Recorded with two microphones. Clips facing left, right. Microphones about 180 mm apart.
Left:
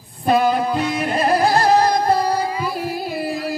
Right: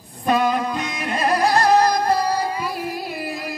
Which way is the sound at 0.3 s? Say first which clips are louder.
Left 3 dB; 30° left (ahead or behind).